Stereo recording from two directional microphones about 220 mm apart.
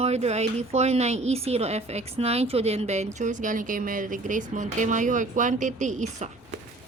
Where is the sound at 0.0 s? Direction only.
30° right (ahead or behind).